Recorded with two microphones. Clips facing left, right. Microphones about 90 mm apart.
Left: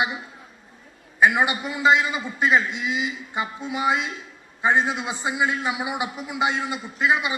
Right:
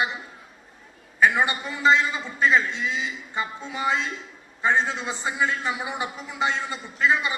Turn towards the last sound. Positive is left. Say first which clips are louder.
# left 1 dB
turn(degrees=15)  # may be behind; listen again after turning